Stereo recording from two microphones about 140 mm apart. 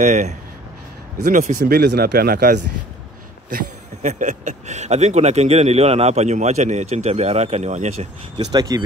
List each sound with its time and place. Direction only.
0.0 s speech: 60° right (ahead or behind); by 2.6 s 90° right
4.0 s speech: 60° right (ahead or behind)
8.5 s speech: 30° right (ahead or behind)